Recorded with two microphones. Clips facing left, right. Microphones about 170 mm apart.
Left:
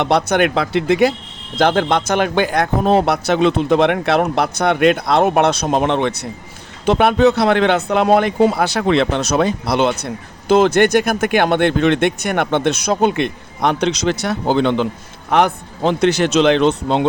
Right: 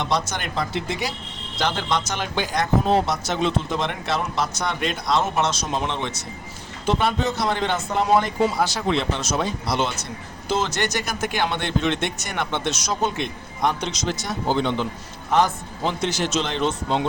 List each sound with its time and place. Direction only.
0.0 s a man's voice: 60° left (ahead or behind)